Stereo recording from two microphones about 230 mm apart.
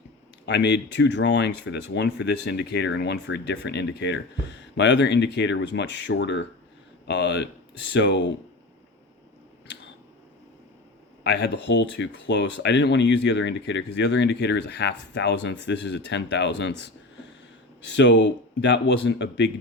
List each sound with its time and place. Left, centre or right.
0.4 s speech: left
11.2 s speech: left
17.8 s speech: left